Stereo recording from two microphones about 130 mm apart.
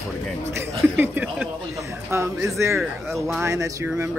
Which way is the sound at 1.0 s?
15° right (ahead or behind).